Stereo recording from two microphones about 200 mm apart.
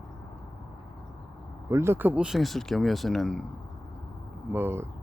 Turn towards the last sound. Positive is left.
turn(degrees=-10)  # may be behind; listen again after turning